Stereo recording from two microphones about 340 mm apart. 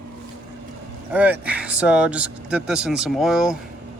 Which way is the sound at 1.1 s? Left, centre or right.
Centre.